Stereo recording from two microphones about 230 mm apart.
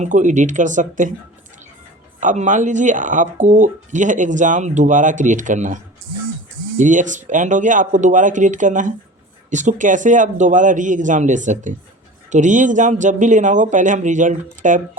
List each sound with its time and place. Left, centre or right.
0.0 s speech: right
2.2 s speech: right